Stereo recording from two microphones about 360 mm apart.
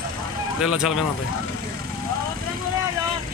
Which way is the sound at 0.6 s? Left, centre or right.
Centre.